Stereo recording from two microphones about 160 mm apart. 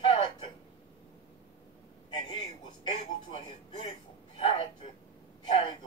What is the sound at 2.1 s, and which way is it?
A man's voice, 25° left (ahead or behind).